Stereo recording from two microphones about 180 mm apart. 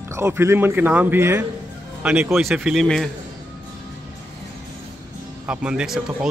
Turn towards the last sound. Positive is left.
turn(degrees=-5)  # may be behind; listen again after turning